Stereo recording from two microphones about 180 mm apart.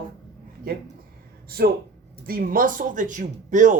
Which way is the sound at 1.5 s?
60° right (ahead or behind).